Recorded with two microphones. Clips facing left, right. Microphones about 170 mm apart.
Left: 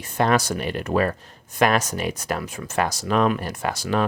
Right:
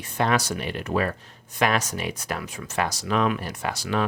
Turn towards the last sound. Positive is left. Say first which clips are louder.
# left 3 dB
turn(degrees=45)  # may be behind; listen again after turning